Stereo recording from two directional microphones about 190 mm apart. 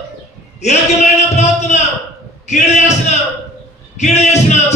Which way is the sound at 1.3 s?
35° left (ahead or behind).